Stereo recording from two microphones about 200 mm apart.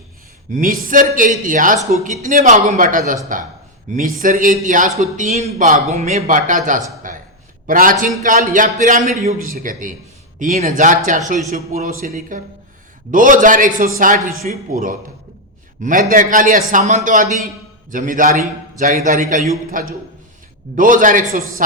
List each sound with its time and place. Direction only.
0.5 s a man's voice: 45° right (ahead or behind)